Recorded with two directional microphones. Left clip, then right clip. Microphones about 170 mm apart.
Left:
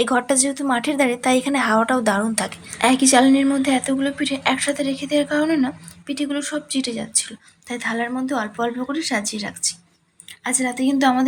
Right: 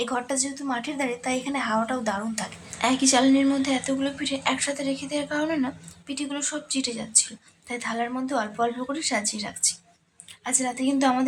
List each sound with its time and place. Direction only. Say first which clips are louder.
0.0 s a woman's voice: left 8 dB; 40° left (ahead or behind); by 11.3 s 15° left (ahead or behind)